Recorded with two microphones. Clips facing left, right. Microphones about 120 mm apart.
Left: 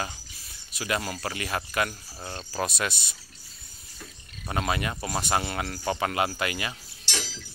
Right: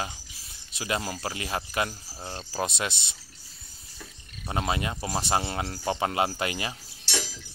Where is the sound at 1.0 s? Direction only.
15° right (ahead or behind).